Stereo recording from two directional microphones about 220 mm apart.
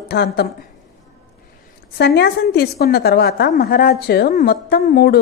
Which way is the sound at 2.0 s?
50° left (ahead or behind).